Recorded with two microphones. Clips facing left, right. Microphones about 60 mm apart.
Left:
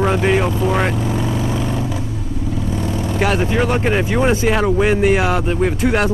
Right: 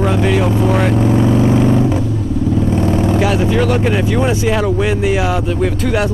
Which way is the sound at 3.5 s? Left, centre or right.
Centre.